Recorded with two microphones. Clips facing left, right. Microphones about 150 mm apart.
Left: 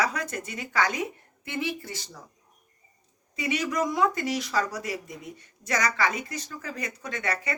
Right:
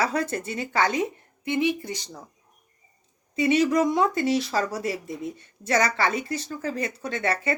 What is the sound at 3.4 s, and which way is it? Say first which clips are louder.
Speech: right 7 dB; 30° right (ahead or behind).